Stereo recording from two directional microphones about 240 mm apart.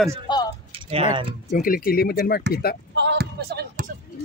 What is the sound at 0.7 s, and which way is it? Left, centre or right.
Typing, right.